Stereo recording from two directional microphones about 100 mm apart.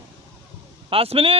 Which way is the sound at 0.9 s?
75° right (ahead or behind).